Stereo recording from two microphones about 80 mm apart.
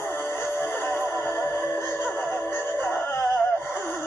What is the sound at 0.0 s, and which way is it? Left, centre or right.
Music, left.